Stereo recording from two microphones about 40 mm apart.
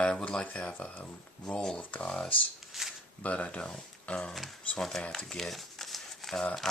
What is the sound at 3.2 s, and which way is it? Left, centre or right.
Speech, left.